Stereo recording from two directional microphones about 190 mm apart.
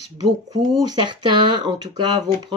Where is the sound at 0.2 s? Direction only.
20° right (ahead or behind).